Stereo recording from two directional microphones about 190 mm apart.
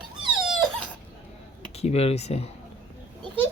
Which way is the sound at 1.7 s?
35° left (ahead or behind).